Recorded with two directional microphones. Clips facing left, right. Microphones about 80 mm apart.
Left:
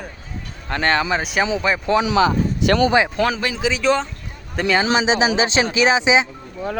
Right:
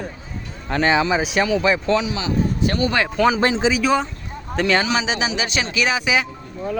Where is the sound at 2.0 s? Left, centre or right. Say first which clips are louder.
Left 5 dB; left.